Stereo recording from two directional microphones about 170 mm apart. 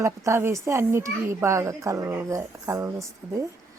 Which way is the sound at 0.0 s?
15° right (ahead or behind).